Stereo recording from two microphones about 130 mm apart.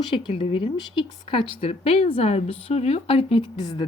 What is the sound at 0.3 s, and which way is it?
A woman's voice, 45° left (ahead or behind).